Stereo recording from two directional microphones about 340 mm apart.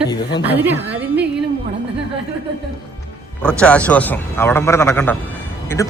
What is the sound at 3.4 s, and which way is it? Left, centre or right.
Speech, centre.